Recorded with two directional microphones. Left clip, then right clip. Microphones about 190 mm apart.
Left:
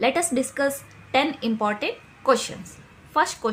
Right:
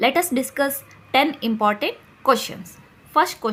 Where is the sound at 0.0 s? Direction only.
30° right (ahead or behind).